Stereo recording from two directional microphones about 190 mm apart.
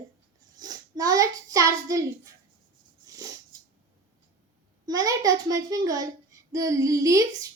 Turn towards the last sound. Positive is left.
turn(degrees=-15)  # may be behind; listen again after turning